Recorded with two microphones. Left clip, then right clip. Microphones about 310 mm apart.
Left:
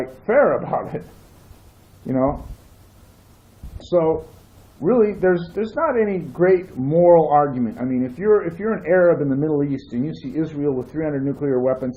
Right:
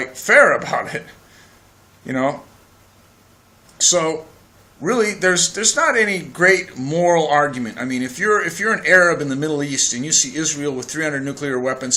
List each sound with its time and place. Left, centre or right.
0.3 s speech: centre
2.0 s speech: centre
4.8 s speech: centre